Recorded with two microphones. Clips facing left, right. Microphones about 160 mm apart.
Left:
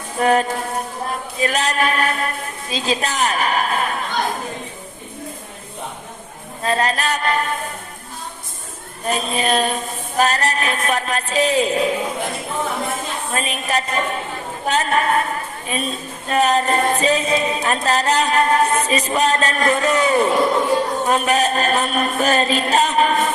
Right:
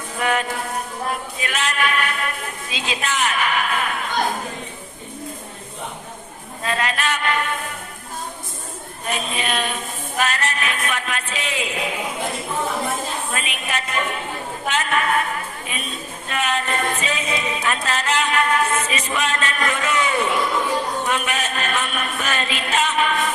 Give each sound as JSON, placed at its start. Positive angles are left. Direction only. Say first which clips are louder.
{"t": 0.2, "sound": "a woman's voice", "louder": "left 6 dB", "side_deg": 35}
{"t": 6.6, "sound": "a woman's voice", "louder": "left 4 dB", "side_deg": 35}
{"t": 9.0, "sound": "a woman's voice", "louder": "left 5 dB", "side_deg": 35}
{"t": 13.3, "sound": "a woman's voice", "louder": "left 5 dB", "side_deg": 35}